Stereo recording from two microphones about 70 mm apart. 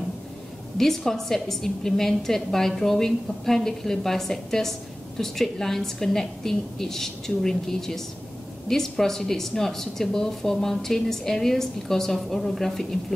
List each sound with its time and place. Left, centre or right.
0.7 s a woman's voice: centre